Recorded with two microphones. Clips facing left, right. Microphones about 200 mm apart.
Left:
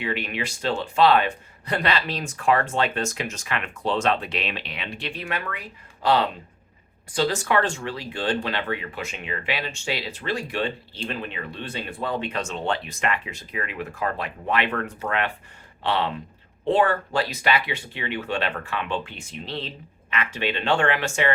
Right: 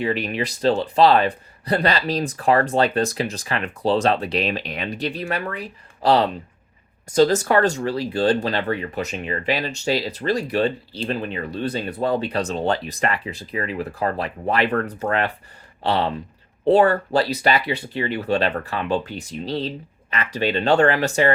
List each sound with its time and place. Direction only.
0.0 s speech: 40° right (ahead or behind)